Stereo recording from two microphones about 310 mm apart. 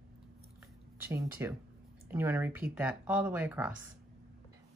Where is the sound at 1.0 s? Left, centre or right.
Centre.